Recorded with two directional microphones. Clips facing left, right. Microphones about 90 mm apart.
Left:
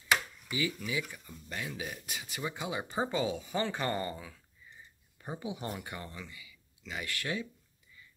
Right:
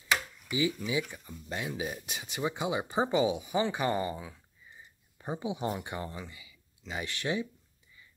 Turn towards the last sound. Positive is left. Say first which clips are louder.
# right 4 dB
turn(degrees=-20)  # may be behind; listen again after turning